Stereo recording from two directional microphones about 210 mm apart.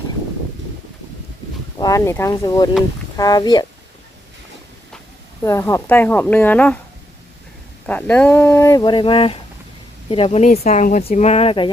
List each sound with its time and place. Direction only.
1.8 s a woman's voice: 15° left (ahead or behind)
5.4 s speech: 15° left (ahead or behind)
7.9 s a woman's voice: 10° left (ahead or behind); by 11.7 s 25° left (ahead or behind)